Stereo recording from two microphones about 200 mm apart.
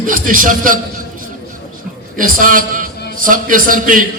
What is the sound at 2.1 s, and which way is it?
A man's voice, 45° right (ahead or behind).